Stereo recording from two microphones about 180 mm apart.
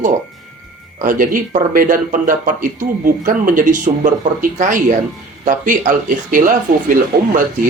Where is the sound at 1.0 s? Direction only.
50° right (ahead or behind).